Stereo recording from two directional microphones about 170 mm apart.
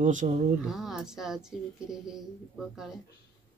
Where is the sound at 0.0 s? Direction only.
45° right (ahead or behind).